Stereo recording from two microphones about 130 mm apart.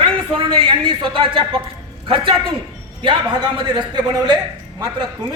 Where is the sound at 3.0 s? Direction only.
40° right (ahead or behind).